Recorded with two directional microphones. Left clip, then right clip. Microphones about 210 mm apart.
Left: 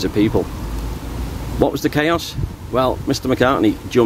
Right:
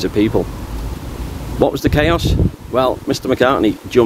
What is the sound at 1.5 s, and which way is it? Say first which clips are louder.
Speech: right 3 dB; 10° right (ahead or behind).